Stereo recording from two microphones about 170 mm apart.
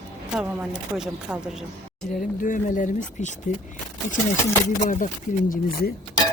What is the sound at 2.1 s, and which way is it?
Speech, 50° left (ahead or behind).